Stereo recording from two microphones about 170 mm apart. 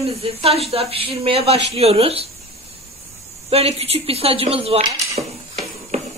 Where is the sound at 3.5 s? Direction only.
35° right (ahead or behind).